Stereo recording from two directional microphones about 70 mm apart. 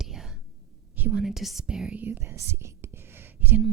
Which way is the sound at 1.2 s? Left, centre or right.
Centre.